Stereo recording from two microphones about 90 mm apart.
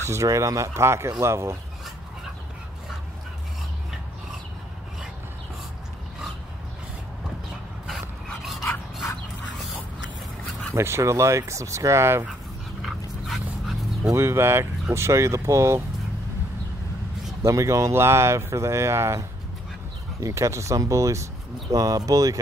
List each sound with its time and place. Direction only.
0.0 s speech: 35° right (ahead or behind)
10.7 s speech: 30° right (ahead or behind)
12.8 s dog: centre (ahead or behind)
14.0 s speech: 30° right (ahead or behind)
17.4 s speech: 35° right (ahead or behind)